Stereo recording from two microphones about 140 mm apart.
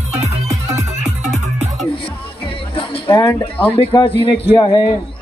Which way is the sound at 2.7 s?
40° left (ahead or behind).